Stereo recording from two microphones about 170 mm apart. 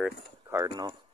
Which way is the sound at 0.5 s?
20° right (ahead or behind).